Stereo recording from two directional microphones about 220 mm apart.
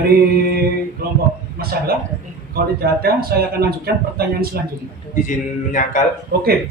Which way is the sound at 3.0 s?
45° right (ahead or behind).